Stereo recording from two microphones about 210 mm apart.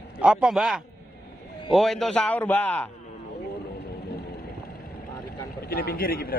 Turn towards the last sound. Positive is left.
turn(degrees=45)  # may be behind; listen again after turning